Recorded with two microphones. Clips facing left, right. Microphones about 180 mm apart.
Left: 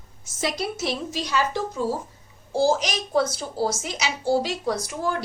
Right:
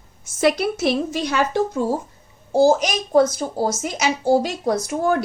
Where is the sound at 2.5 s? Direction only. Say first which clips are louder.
Right 6 dB; 45° right (ahead or behind).